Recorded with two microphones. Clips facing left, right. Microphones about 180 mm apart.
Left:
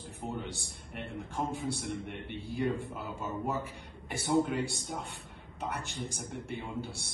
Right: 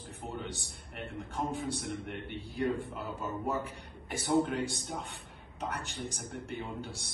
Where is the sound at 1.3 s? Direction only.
Centre (ahead or behind).